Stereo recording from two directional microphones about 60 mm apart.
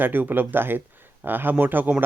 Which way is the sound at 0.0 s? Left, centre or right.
Right.